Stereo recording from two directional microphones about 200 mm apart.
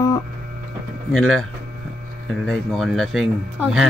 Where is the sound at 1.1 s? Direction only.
Centre (ahead or behind).